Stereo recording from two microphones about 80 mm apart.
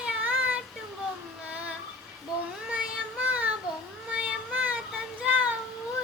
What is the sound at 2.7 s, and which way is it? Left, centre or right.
Child singing, centre.